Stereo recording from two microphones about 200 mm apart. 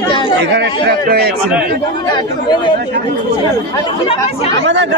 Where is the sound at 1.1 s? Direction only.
50° right (ahead or behind).